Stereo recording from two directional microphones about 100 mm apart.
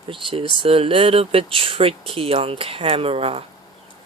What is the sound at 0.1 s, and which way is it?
Speech, 60° right (ahead or behind).